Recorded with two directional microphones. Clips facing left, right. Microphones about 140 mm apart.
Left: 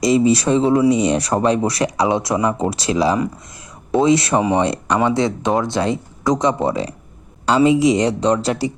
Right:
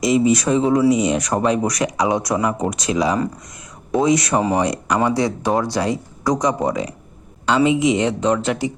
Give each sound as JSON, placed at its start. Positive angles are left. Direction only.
{"t": 0.0, "sound": "speech", "side_deg": 35}